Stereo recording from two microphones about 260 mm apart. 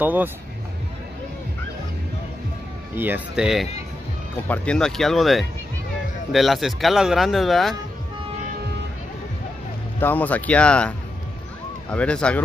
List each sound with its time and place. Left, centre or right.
0.0 s speech: centre
3.0 s speech: centre
9.9 s speech: centre